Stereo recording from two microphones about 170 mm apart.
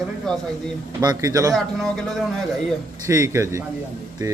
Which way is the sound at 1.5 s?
Centre (ahead or behind).